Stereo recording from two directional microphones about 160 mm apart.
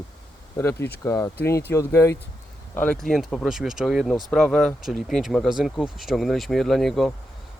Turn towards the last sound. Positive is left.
turn(degrees=0)  # may be behind; listen again after turning